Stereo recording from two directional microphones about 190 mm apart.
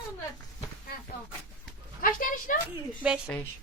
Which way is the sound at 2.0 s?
45° left (ahead or behind).